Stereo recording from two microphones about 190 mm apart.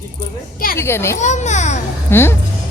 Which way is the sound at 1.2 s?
40° left (ahead or behind).